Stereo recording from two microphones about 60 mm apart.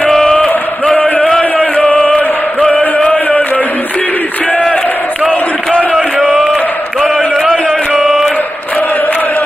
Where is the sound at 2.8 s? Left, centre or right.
Left.